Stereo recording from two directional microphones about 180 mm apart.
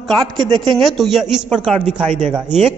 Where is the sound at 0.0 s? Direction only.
Centre (ahead or behind).